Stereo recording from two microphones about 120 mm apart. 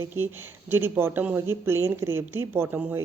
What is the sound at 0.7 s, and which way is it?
Speech, 20° right (ahead or behind).